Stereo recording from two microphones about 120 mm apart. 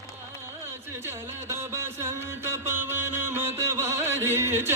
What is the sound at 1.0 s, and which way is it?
Music, 20° right (ahead or behind).